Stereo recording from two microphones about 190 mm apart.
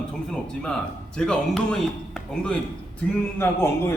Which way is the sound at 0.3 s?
5° left (ahead or behind).